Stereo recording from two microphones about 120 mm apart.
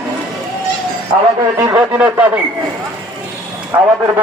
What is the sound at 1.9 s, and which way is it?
Speech, 10° right (ahead or behind).